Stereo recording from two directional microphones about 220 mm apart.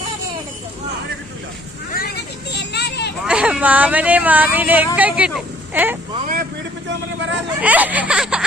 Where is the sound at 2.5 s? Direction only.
50° left (ahead or behind).